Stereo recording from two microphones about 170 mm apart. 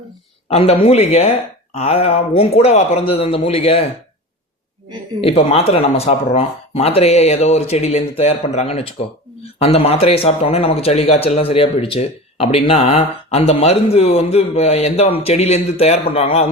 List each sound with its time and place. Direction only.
0.5 s speech: 35° left (ahead or behind)
5.2 s speech: 40° left (ahead or behind)